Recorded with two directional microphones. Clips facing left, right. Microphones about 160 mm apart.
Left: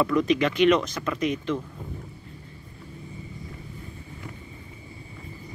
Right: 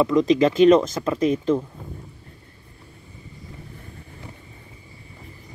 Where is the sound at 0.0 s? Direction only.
20° right (ahead or behind).